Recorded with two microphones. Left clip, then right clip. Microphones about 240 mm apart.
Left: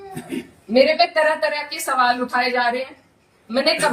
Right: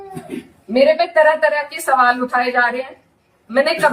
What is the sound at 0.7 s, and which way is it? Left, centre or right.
A woman's voice, centre.